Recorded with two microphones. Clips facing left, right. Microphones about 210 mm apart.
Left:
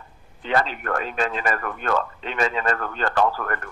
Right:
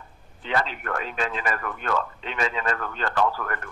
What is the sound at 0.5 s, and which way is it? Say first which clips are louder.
Speech: left 4 dB; 45° left (ahead or behind).